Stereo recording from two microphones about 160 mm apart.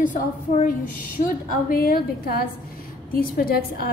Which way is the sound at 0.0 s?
50° left (ahead or behind).